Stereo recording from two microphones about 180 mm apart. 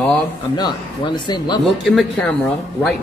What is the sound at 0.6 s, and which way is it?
Speech, 25° left (ahead or behind).